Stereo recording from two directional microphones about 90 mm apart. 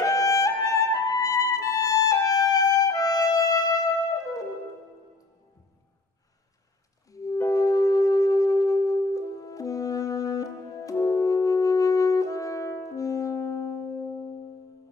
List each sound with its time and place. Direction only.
0.0 s music: 40° left (ahead or behind)
7.1 s music: 40° left (ahead or behind)